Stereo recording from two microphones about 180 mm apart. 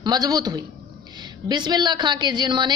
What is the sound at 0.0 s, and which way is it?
A woman's voice, 20° right (ahead or behind).